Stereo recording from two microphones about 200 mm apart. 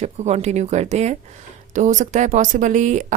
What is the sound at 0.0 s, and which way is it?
A woman's voice, 35° right (ahead or behind).